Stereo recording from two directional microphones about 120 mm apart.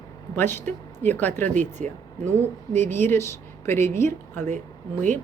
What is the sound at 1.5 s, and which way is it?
Speech, 85° right.